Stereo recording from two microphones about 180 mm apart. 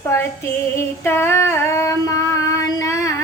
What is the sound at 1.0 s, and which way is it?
Female singing, 15° left (ahead or behind).